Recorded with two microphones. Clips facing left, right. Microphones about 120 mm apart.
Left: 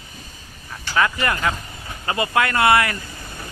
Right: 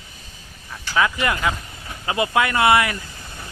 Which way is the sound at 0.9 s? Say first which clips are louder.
Even; 10° right (ahead or behind).